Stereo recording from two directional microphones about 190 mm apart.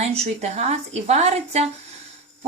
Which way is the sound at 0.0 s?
35° right (ahead or behind).